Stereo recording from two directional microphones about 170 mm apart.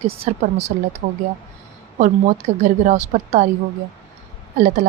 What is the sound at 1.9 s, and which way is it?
Speech, 50° right (ahead or behind).